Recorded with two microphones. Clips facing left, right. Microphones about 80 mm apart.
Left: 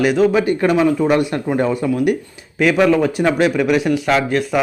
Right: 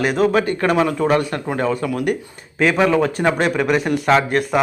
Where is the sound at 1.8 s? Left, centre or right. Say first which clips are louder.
Left 4 dB; centre.